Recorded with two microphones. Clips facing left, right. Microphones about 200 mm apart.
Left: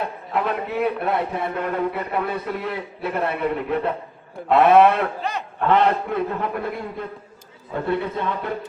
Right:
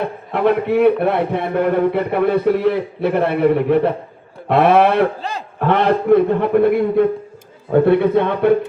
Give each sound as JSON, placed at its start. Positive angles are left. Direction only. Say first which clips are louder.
{"t": 0.0, "sound": "a man's voice", "louder": "right 7 dB", "side_deg": -60}